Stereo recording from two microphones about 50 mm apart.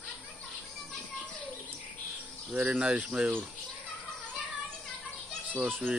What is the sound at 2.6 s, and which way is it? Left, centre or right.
Speech, centre.